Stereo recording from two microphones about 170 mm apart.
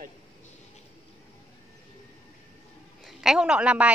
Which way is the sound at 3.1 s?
5° right (ahead or behind).